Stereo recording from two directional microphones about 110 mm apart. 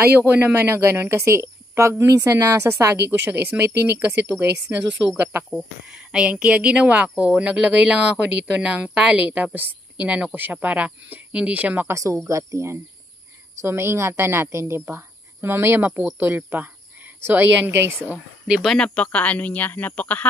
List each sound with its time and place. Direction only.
0.3 s speech: 20° right (ahead or behind)
3.1 s speech: 15° right (ahead or behind)
5.5 s speech: 5° right (ahead or behind)
11.9 s a woman's voice: 25° right (ahead or behind)
18.1 s speech: 5° right (ahead or behind)
19.1 s a woman's voice: 10° left (ahead or behind)